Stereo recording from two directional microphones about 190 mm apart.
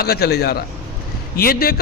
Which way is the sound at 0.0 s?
55° left (ahead or behind).